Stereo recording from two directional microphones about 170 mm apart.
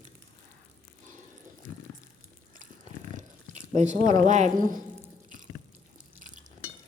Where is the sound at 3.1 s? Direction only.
45° right (ahead or behind).